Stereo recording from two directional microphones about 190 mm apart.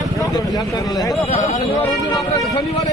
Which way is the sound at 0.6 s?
20° left (ahead or behind).